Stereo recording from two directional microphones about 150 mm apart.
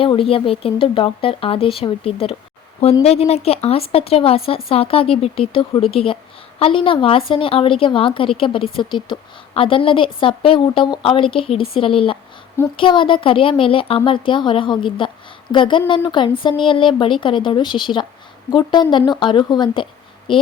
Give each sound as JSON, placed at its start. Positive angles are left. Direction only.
{"t": 0.0, "sound": "a woman's voice", "side_deg": 35}